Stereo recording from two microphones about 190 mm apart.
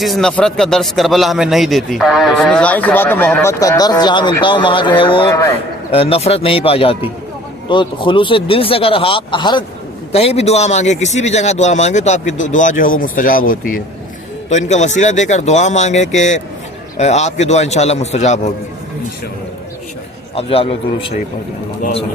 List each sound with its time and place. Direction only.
0.0 s a man's voice: centre (ahead or behind); by 5.2 s 25° left (ahead or behind)
5.3 s a man's voice: 15° left (ahead or behind)
5.9 s a man's voice: 30° left (ahead or behind)
20.3 s a man's voice: 30° left (ahead or behind)